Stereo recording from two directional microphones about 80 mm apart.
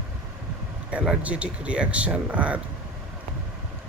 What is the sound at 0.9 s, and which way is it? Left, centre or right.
Speech, centre.